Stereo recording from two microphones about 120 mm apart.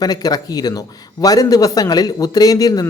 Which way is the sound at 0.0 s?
30° left (ahead or behind).